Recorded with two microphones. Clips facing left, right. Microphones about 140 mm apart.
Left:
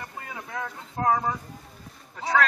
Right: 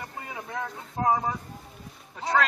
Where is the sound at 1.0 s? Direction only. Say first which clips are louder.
Left 1 dB; 15° right (ahead or behind).